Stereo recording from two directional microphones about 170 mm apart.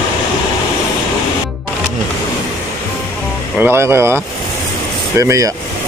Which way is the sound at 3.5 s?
10° right (ahead or behind).